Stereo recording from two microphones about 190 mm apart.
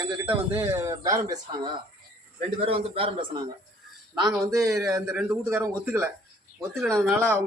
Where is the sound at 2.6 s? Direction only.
30° right (ahead or behind).